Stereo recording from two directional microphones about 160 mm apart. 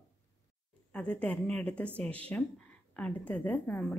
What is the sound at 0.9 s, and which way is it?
A woman's voice, 5° left (ahead or behind).